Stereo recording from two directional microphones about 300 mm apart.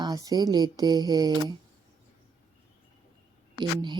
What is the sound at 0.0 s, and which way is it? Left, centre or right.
Music, centre.